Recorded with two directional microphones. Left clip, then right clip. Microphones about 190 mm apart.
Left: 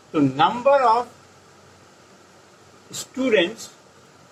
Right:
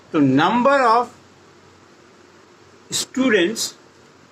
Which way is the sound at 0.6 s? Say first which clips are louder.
Right 1 dB; 55° right (ahead or behind).